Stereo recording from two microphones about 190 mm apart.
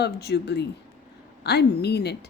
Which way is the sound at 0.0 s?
60° left (ahead or behind).